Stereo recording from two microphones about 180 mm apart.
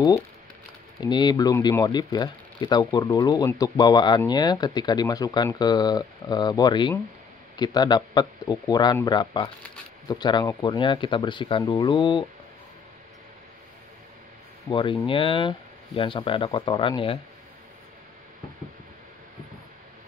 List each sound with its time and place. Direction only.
1.0 s speech: 25° left (ahead or behind)
14.7 s speech: 25° left (ahead or behind)